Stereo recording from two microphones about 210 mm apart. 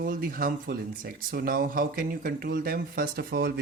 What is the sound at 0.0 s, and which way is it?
Speech, 45° right (ahead or behind).